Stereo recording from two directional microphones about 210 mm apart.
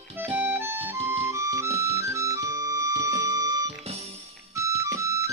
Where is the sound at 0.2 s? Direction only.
10° right (ahead or behind).